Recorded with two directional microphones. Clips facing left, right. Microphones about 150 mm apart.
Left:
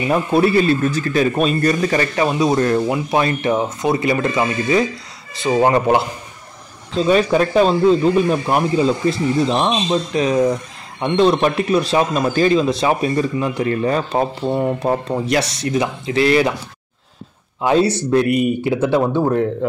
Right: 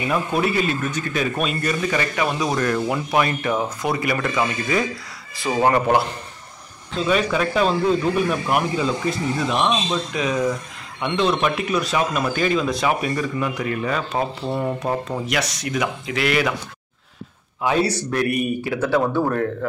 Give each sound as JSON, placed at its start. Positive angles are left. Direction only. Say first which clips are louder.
{"t": 0.1, "sound": "speech", "louder": "left 7 dB", "side_deg": 35}
{"t": 2.2, "sound": "speech", "louder": "left 7 dB", "side_deg": 25}
{"t": 7.1, "sound": "speech", "louder": "left 5 dB", "side_deg": 35}
{"t": 17.6, "sound": "speech", "louder": "left 5 dB", "side_deg": 25}